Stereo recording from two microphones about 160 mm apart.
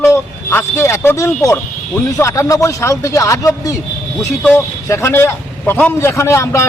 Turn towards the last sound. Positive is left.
turn(degrees=15)  # may be behind; listen again after turning